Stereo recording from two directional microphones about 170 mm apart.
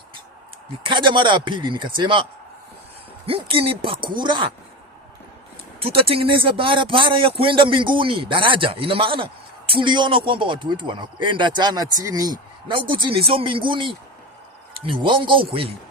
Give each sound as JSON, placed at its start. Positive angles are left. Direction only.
{"t": 0.9, "sound": "speech", "side_deg": -30}
{"t": 3.2, "sound": "speech", "side_deg": -35}
{"t": 5.8, "sound": "speech", "side_deg": -30}